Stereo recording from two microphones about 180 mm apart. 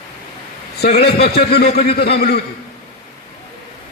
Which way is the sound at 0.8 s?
65° left (ahead or behind).